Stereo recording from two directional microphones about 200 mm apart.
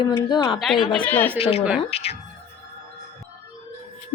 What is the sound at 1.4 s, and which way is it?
Speech, 30° left (ahead or behind).